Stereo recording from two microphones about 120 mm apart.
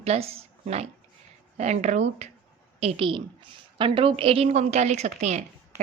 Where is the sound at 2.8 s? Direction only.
55° right (ahead or behind).